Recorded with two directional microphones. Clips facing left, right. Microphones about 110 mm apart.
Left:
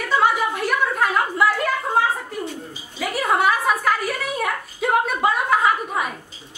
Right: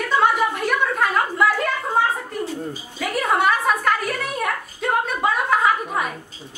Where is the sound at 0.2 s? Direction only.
Centre (ahead or behind).